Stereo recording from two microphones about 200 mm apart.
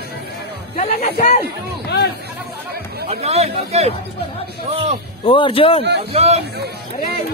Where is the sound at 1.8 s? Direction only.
55° left (ahead or behind).